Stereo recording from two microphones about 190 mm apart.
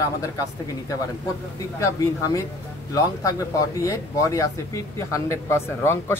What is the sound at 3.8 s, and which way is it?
Speech, 15° left (ahead or behind).